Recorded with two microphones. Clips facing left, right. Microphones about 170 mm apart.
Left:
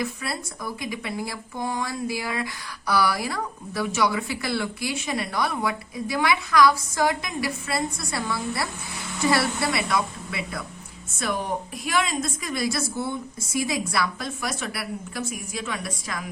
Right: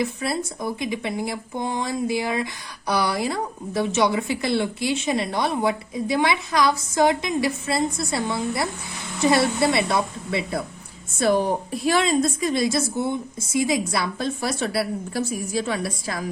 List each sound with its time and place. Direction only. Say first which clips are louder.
0.0 s a woman's voice: right 5 dB; 25° right (ahead or behind)